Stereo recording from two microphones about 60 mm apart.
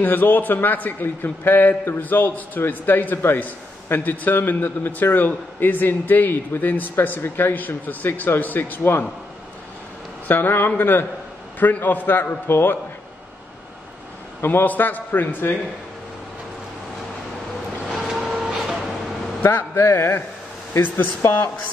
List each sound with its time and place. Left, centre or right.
0.0 s a man's voice: left
10.2 s a man's voice: left
14.4 s a man's voice: left
17.8 s vehicle: centre
19.4 s a man's voice: left